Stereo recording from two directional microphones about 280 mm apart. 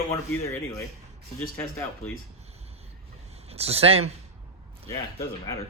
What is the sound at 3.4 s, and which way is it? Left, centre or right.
Speech, right.